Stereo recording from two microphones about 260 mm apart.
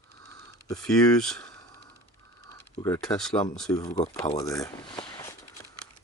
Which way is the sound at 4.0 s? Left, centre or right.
Left.